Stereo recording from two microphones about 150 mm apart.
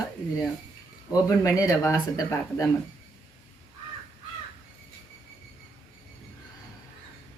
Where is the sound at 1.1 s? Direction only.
25° left (ahead or behind).